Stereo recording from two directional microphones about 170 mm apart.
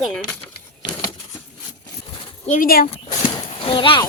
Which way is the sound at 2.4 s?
50° left (ahead or behind).